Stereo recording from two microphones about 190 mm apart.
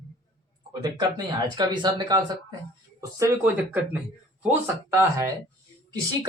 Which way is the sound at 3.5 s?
10° right (ahead or behind).